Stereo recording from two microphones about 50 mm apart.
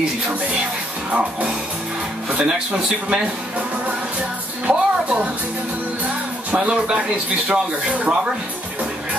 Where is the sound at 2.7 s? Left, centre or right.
Right.